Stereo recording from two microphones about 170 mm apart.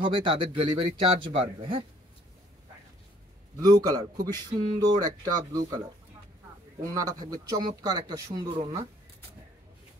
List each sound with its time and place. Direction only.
0.0 s speech: 30° right (ahead or behind)
3.5 s speech: 20° right (ahead or behind)
6.8 s speech: 20° right (ahead or behind)